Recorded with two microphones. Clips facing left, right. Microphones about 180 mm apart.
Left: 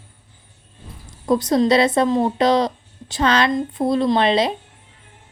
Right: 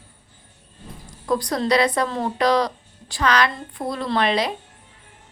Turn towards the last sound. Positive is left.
turn(degrees=25)  # may be behind; listen again after turning